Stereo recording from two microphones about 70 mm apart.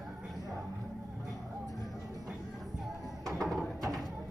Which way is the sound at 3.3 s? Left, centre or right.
Centre.